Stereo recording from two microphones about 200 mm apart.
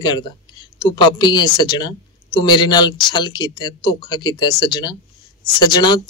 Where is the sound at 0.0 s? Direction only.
20° left (ahead or behind).